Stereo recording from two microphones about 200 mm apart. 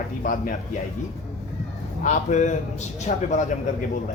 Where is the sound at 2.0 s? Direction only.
40° left (ahead or behind).